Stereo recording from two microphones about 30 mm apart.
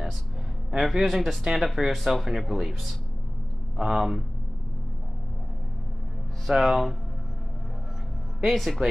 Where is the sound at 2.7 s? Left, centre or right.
Centre.